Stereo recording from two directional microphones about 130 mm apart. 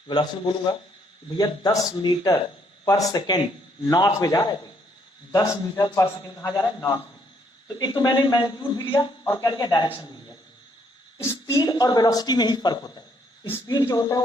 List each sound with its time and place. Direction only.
0.1 s speech: 35° left (ahead or behind)